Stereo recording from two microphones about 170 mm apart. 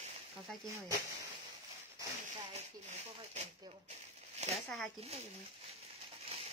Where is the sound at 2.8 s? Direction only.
45° right (ahead or behind).